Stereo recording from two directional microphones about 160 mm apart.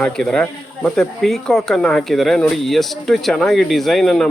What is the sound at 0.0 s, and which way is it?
Speech, 5° left (ahead or behind).